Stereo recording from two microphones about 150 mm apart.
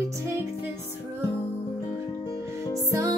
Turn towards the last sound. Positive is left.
turn(degrees=-20)  # may be behind; listen again after turning